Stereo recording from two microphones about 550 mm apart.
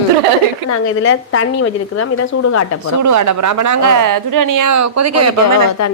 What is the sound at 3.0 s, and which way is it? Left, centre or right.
Speech, right.